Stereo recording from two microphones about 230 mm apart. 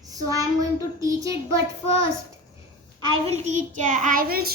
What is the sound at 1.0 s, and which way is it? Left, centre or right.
Speech, centre.